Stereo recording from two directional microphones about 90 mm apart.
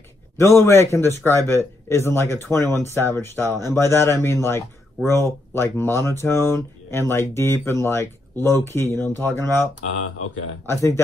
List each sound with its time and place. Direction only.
0.4 s speech: 30° left (ahead or behind)